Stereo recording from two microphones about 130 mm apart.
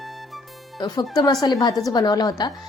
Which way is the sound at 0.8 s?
30° left (ahead or behind).